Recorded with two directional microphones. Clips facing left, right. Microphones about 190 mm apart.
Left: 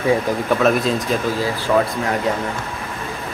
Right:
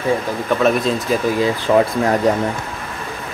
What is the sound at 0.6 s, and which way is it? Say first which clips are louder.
Speech: right 3 dB; centre (ahead or behind).